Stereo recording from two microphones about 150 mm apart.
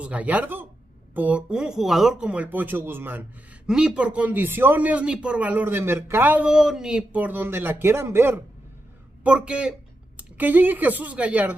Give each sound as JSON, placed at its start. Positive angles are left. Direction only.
{"t": 0.0, "sound": "speech", "side_deg": -10}